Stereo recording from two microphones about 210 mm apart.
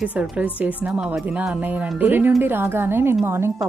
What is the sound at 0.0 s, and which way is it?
Speech, 5° right (ahead or behind).